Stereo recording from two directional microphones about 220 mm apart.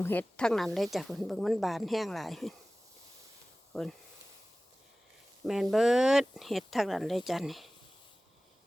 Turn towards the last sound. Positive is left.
turn(degrees=0)  # may be behind; listen again after turning